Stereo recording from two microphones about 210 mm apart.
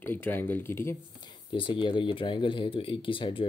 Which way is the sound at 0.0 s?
10° left (ahead or behind).